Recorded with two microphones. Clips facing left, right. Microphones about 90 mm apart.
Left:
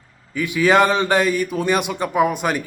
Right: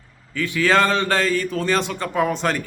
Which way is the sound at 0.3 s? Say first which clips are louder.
Left 3 dB; 15° left (ahead or behind).